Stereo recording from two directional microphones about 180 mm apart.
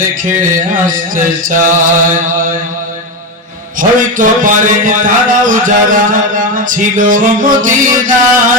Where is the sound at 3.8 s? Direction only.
45° right (ahead or behind).